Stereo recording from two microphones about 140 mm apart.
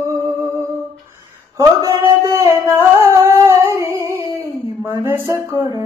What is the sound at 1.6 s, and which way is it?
Singing, 25° right (ahead or behind).